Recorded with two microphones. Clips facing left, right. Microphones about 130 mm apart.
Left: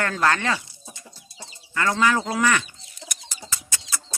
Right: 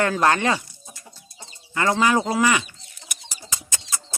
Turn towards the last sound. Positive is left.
turn(degrees=-20)  # may be behind; listen again after turning